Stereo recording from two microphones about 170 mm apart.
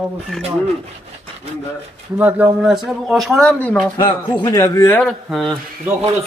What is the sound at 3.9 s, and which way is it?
A man's voice, 25° left (ahead or behind).